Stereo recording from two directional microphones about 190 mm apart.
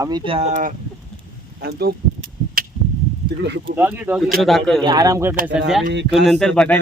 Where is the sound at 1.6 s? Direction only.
55° right (ahead or behind).